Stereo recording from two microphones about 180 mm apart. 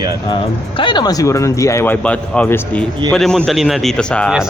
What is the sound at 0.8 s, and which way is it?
A man's voice, 25° left (ahead or behind).